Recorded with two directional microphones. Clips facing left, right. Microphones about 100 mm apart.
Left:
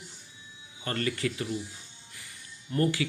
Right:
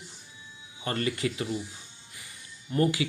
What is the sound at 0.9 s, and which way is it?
Speech, 20° right (ahead or behind).